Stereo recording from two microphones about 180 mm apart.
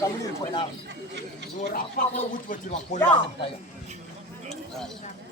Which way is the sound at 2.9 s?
40° left (ahead or behind).